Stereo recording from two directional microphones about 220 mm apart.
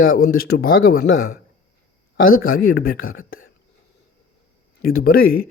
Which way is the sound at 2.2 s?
40° left (ahead or behind).